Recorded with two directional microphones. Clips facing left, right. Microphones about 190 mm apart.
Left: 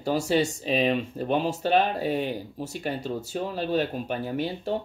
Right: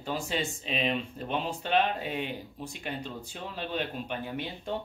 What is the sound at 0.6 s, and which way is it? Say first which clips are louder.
Speech: left 7 dB; 40° left (ahead or behind).